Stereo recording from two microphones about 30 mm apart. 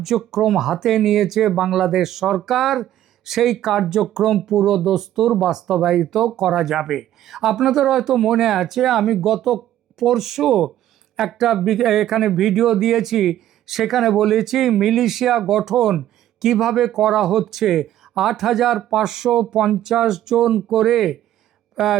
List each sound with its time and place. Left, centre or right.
0.0 s speech: centre
21.8 s speech: centre